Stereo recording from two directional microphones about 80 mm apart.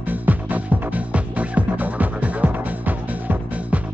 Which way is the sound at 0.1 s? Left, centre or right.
Right.